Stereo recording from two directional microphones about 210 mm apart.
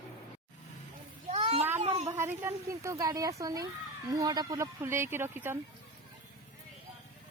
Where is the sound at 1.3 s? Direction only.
30° right (ahead or behind).